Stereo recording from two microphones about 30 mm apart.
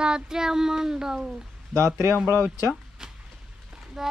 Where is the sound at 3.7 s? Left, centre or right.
Centre.